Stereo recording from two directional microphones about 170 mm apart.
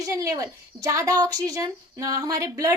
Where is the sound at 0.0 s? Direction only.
20° right (ahead or behind).